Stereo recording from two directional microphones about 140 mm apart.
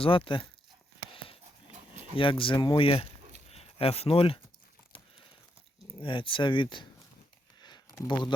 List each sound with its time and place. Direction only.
0.0 s speech: 40° left (ahead or behind)
1.1 s a sound: 40° left (ahead or behind)
2.1 s speech: 40° left (ahead or behind)
6.0 s speech: 40° left (ahead or behind)
7.6 s a sound: 30° left (ahead or behind)
8.0 s speech: 35° left (ahead or behind)